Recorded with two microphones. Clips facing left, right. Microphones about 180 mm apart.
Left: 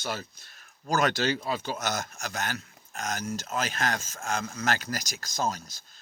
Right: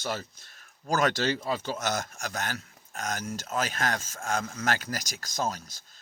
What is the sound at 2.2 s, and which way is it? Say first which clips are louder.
Speech: even; 45° right (ahead or behind).